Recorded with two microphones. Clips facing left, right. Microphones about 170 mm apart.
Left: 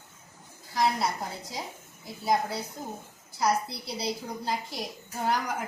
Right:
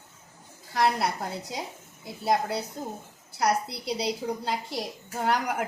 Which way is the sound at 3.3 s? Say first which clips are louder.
Right 1 dB; 65° right (ahead or behind).